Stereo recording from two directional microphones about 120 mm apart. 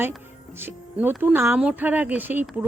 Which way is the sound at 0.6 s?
15° right (ahead or behind).